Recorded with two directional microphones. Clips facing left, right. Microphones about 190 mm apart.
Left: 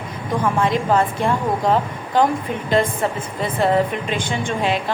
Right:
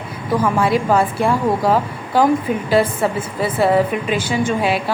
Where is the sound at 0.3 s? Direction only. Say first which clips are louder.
Right 3 dB; 10° right (ahead or behind).